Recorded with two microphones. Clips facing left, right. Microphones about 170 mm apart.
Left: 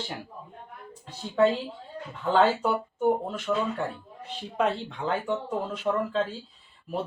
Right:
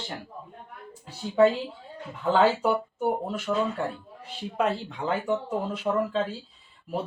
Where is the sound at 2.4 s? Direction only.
10° right (ahead or behind).